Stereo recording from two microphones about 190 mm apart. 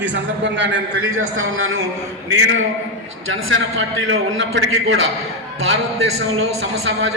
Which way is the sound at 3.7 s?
85° right.